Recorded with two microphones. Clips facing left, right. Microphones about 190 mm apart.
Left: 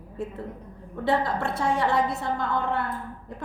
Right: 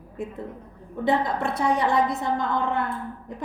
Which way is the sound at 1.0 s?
15° right (ahead or behind).